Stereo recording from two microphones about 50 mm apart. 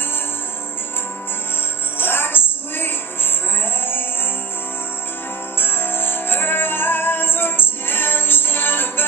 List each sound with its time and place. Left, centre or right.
2.0 s music: left
5.6 s music: left